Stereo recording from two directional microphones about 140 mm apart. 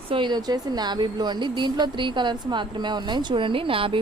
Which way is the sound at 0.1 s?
35° right (ahead or behind).